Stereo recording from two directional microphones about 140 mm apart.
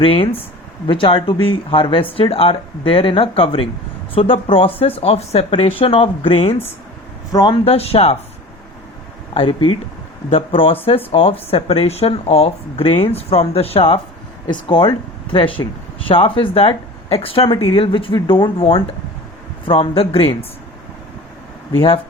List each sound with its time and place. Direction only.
0.0 s speech: 40° left (ahead or behind)
9.3 s speech: 40° left (ahead or behind)
21.8 s speech: 40° left (ahead or behind)